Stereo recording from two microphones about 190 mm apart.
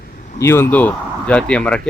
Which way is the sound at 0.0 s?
45° left (ahead or behind).